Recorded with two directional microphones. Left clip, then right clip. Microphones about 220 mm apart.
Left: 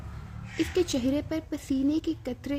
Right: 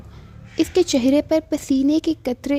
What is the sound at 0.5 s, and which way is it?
Speech, 35° right (ahead or behind).